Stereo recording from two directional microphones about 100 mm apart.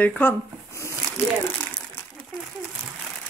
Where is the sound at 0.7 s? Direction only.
30° left (ahead or behind).